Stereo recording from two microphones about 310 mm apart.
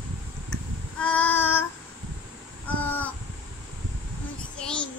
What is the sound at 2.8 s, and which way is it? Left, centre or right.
Crow, centre.